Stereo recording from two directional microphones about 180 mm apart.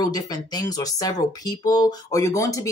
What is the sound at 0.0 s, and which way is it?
Speech, 20° left (ahead or behind).